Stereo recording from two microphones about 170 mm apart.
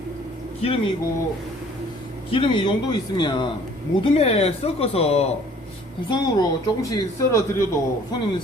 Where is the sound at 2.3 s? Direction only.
30° left (ahead or behind).